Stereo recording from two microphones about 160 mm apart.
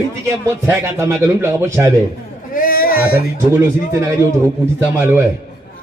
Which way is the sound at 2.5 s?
65° left (ahead or behind).